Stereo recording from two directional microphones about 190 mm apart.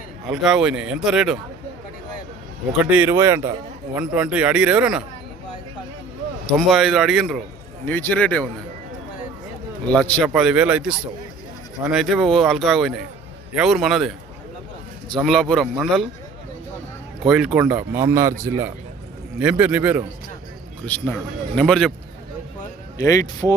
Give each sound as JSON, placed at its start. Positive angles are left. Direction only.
{"t": 0.3, "sound": "speech", "side_deg": -5}
{"t": 2.7, "sound": "speech", "side_deg": -10}
{"t": 6.5, "sound": "speech", "side_deg": 0}
{"t": 9.8, "sound": "speech", "side_deg": 5}
{"t": 15.2, "sound": "speech", "side_deg": 0}
{"t": 17.2, "sound": "speech", "side_deg": -5}
{"t": 20.8, "sound": "speech", "side_deg": 10}
{"t": 23.0, "sound": "speech", "side_deg": 20}